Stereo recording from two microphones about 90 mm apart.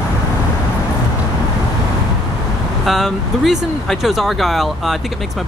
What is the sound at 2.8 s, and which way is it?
Speech, centre (ahead or behind).